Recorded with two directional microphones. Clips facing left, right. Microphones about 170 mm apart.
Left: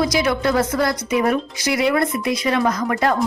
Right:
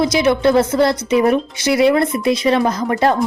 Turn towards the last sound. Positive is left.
turn(degrees=-30)  # may be behind; listen again after turning